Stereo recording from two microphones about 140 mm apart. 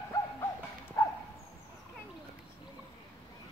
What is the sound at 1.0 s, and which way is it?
Bow-wow, 25° left (ahead or behind).